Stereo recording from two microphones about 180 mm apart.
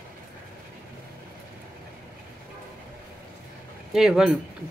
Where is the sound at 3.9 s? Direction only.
Centre (ahead or behind).